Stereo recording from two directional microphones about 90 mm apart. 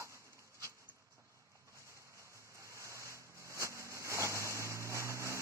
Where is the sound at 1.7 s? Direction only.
35° right (ahead or behind).